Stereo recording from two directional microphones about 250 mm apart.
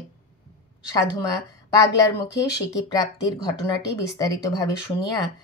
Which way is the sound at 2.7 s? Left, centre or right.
Centre.